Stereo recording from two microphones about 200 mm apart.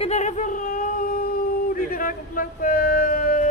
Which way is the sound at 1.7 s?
45° left (ahead or behind).